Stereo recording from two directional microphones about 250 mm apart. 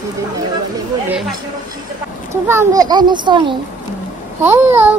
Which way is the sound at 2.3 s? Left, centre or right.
Centre.